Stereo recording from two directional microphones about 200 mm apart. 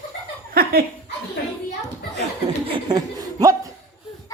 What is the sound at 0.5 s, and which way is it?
Giggle, 50° right (ahead or behind).